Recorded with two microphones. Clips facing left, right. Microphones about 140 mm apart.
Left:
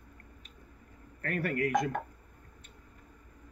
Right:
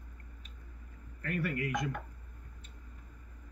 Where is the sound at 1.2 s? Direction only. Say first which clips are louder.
Left 4 dB; 45° left (ahead or behind).